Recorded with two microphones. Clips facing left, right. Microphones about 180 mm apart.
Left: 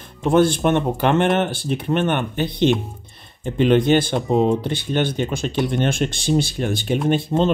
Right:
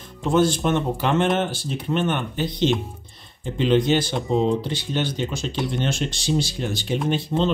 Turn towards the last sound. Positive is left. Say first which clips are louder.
# left 4 dB
turn(degrees=55)  # may be behind; listen again after turning